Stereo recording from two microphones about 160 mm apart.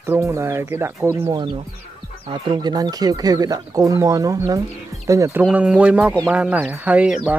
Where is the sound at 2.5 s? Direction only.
25° right (ahead or behind).